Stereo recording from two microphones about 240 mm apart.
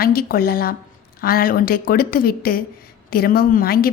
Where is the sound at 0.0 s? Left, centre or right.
Left.